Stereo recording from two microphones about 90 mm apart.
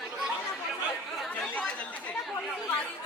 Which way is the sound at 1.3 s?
15° left (ahead or behind).